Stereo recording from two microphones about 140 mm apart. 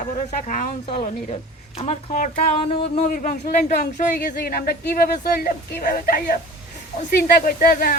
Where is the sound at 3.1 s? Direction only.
75° left (ahead or behind).